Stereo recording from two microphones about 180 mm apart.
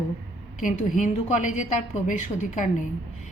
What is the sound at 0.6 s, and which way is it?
A woman's voice, 45° left (ahead or behind).